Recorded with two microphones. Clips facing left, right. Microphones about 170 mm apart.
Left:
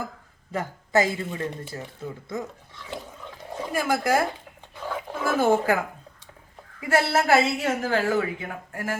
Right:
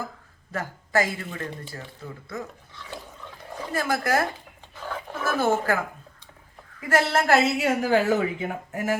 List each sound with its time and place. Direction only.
0.5 s speech: 20° left (ahead or behind)
4.8 s a sound: 10° left (ahead or behind)
6.8 s a woman's voice: 10° left (ahead or behind)
7.8 s speech: 15° right (ahead or behind)